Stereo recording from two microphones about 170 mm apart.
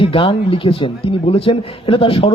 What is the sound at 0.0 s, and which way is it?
A man's voice, 30° left (ahead or behind).